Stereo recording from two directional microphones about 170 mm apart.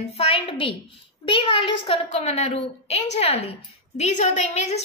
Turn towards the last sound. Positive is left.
turn(degrees=40)  # may be behind; listen again after turning